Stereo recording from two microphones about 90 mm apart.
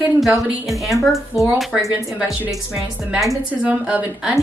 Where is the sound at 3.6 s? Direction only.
15° right (ahead or behind).